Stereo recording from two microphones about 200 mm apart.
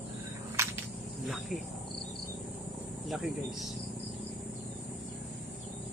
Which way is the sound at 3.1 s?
Centre (ahead or behind).